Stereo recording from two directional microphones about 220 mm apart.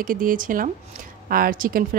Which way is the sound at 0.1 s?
40° right (ahead or behind).